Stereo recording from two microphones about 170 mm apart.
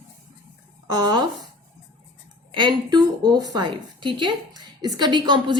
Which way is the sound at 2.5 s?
25° right (ahead or behind).